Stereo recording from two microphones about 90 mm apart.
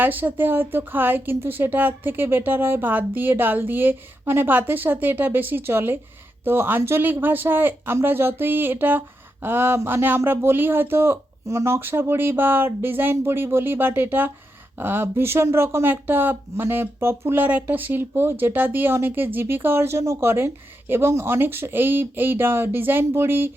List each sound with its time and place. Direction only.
0.0 s speech: 20° right (ahead or behind)